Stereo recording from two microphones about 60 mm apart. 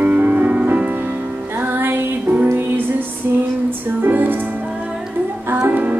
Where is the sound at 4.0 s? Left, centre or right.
Right.